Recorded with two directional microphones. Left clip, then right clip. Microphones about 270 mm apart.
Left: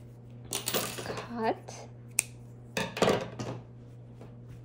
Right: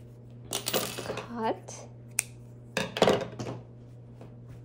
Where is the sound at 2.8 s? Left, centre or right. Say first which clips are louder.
Right 3 dB; centre.